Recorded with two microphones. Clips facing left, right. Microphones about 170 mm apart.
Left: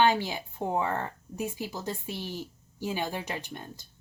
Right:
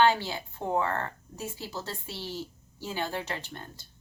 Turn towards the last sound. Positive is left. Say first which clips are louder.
# left 1 dB
turn(degrees=15)  # may be behind; listen again after turning